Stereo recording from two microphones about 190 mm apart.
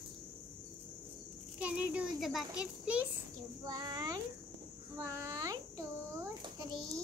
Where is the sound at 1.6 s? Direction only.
5° right (ahead or behind).